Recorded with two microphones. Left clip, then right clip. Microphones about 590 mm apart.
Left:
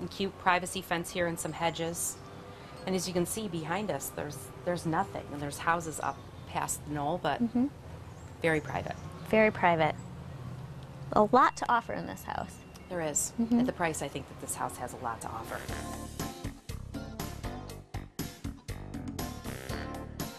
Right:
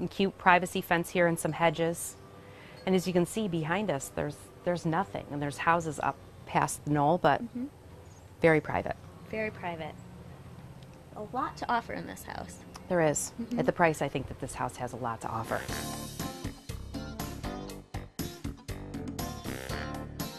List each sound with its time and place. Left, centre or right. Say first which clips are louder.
0.2 s a woman's voice: right 4 dB; right
9.3 s speech: left 10 dB; centre
11.6 s speech: left 2 dB; centre
12.9 s a woman's voice: right 6 dB; right
15.5 s speech: right 4 dB; centre
17.2 s music: right 3 dB; centre